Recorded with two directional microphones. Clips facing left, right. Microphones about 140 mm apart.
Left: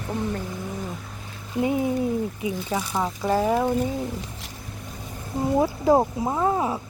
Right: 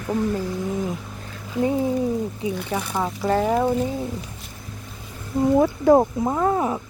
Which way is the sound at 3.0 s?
5° left (ahead or behind).